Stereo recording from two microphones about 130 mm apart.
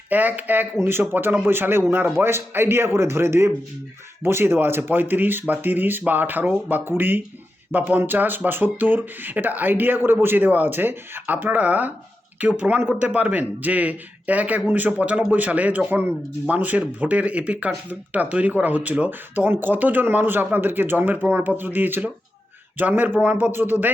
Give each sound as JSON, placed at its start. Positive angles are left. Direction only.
{"t": 0.1, "sound": "speech", "side_deg": -15}